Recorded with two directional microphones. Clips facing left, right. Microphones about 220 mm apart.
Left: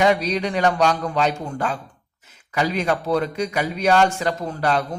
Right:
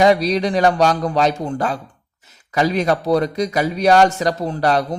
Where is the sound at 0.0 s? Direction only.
35° right (ahead or behind).